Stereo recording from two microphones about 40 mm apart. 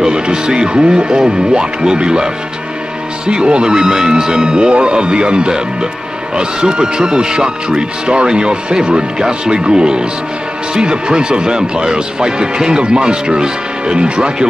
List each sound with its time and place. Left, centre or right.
0.0 s speech: centre